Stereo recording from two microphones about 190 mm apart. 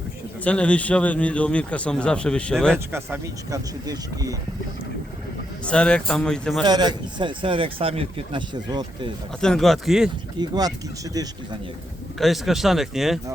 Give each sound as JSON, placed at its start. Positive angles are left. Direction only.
{"t": 0.4, "sound": "speech", "side_deg": 5}
{"t": 2.7, "sound": "speech", "side_deg": -10}
{"t": 5.6, "sound": "speech", "side_deg": 5}
{"t": 6.7, "sound": "speech", "side_deg": -20}
{"t": 9.4, "sound": "speech", "side_deg": 0}
{"t": 10.4, "sound": "speech", "side_deg": -20}
{"t": 12.2, "sound": "speech", "side_deg": 0}